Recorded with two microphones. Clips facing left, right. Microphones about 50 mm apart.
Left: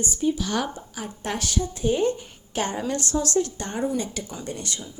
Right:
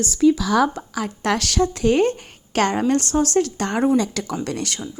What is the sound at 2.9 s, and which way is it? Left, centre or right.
Speech, right.